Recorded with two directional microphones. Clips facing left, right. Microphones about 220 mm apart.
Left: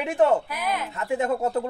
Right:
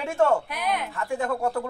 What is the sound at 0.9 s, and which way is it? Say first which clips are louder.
Speech: left 3 dB; 20° left (ahead or behind).